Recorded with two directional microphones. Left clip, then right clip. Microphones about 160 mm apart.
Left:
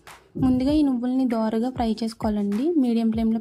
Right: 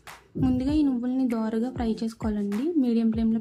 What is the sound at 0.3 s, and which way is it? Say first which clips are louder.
Speech: left 4 dB; 30° left (ahead or behind).